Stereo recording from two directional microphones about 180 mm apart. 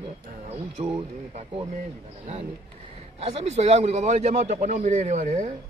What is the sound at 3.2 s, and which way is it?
A man's voice, 35° right (ahead or behind).